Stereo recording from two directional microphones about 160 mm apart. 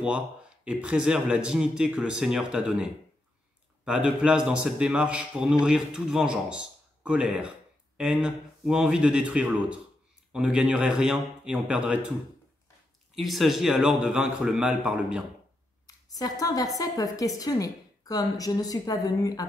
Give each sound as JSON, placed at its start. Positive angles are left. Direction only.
{"t": 0.7, "sound": "a man's voice", "side_deg": -5}
{"t": 13.1, "sound": "a man's voice", "side_deg": 0}
{"t": 16.1, "sound": "a woman's voice", "side_deg": 25}